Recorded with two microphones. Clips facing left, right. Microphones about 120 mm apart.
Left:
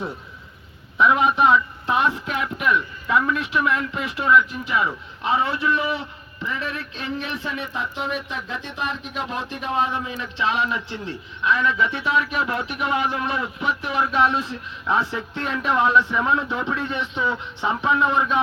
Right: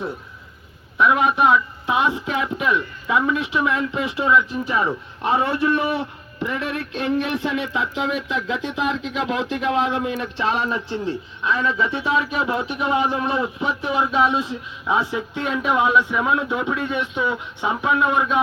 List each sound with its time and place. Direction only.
0.9 s a man's voice: centre (ahead or behind)
2.0 s speech: 15° right (ahead or behind)
4.6 s speech: 35° right (ahead or behind)
5.2 s a man's voice: 50° right (ahead or behind)
10.8 s a man's voice: 30° right (ahead or behind); by 18.4 s 5° right (ahead or behind)